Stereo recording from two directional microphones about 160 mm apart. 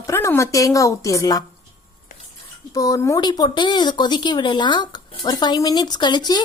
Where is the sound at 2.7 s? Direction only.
20° left (ahead or behind).